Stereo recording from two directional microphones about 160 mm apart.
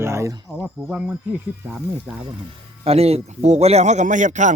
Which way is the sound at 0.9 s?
5° right (ahead or behind).